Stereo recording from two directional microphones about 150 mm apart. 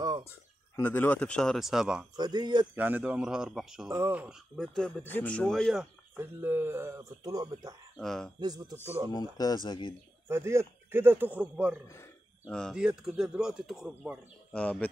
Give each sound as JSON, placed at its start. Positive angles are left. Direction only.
{"t": 0.3, "sound": "speech", "side_deg": 15}
{"t": 2.1, "sound": "speech", "side_deg": -25}
{"t": 2.7, "sound": "speech", "side_deg": -10}
{"t": 3.9, "sound": "a man's voice", "side_deg": -15}
{"t": 4.6, "sound": "speech", "side_deg": 5}
{"t": 6.1, "sound": "speech", "side_deg": -15}
{"t": 8.0, "sound": "speech", "side_deg": 0}
{"t": 8.4, "sound": "speech", "side_deg": -25}
{"t": 9.1, "sound": "speech", "side_deg": 25}
{"t": 10.2, "sound": "a man's voice", "side_deg": -15}
{"t": 12.4, "sound": "speech", "side_deg": 5}
{"t": 14.5, "sound": "speech", "side_deg": 10}